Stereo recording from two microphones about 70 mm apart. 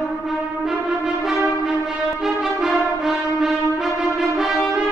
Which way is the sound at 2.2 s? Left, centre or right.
Centre.